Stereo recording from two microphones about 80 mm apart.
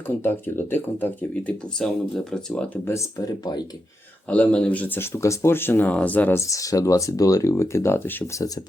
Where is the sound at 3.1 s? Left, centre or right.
Left.